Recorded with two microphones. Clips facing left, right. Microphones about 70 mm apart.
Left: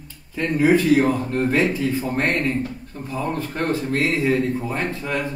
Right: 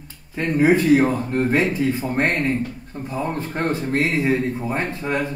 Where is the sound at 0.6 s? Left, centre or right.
Right.